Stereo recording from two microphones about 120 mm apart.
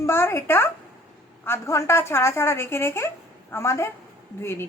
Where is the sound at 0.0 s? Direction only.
20° left (ahead or behind).